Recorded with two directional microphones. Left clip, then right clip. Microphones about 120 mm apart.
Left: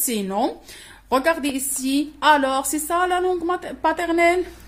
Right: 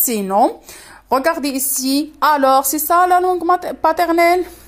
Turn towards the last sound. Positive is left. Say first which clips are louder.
# right 5 dB
turn(degrees=-50)  # may be behind; listen again after turning